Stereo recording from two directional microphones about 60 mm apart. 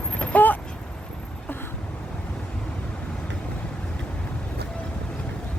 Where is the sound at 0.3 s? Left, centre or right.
Left.